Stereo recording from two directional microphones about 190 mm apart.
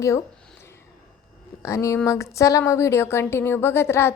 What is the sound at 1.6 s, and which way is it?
A woman's voice, 15° left (ahead or behind).